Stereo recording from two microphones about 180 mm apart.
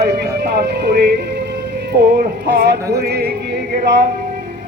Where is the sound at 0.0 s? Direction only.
65° right (ahead or behind).